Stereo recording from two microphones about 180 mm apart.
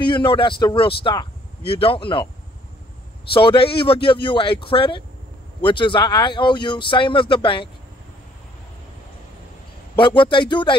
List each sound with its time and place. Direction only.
0.0 s speech: 30° left (ahead or behind)
3.3 s speech: 30° left (ahead or behind)
9.9 s speech: 25° left (ahead or behind)